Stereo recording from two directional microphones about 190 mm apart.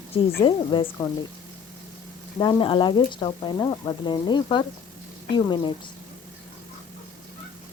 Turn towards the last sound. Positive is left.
turn(degrees=25)  # may be behind; listen again after turning